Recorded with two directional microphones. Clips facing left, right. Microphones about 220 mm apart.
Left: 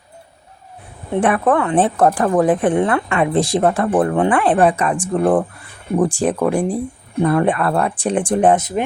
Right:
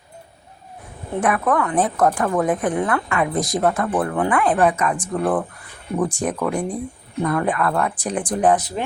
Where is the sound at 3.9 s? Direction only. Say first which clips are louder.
Left 6 dB; 45° left (ahead or behind).